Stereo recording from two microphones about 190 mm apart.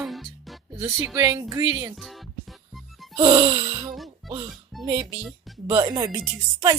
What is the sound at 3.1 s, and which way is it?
Speech, 25° right (ahead or behind).